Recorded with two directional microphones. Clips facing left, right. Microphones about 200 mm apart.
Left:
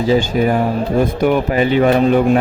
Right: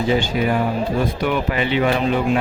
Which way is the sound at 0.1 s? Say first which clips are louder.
Left 6 dB; 40° left (ahead or behind).